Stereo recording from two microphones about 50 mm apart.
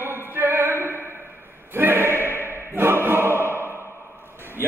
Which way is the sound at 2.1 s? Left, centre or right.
Left.